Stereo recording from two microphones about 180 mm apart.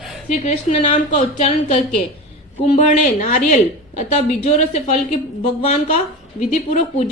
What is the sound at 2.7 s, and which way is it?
A woman's voice, 40° left (ahead or behind).